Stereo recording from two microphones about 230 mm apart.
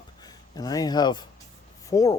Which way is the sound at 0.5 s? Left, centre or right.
Centre.